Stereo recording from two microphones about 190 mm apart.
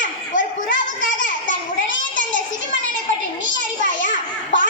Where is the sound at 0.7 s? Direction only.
75° left (ahead or behind).